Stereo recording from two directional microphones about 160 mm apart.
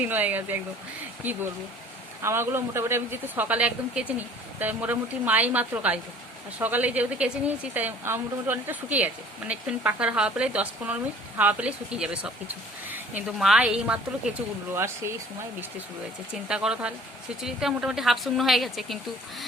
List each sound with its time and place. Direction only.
0.0 s a woman's voice: 10° right (ahead or behind)
16.3 s a woman's voice: 5° right (ahead or behind)